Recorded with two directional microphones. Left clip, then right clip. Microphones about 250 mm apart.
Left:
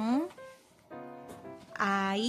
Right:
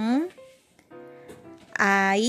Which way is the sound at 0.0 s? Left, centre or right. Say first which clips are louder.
Right 5 dB; centre.